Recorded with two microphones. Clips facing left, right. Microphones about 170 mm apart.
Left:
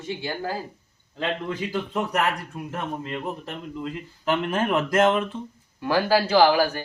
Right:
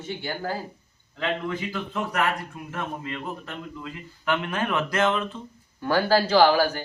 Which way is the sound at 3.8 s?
40° left (ahead or behind).